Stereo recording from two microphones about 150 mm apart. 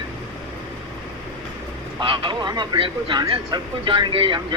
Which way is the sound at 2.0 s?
35° right (ahead or behind).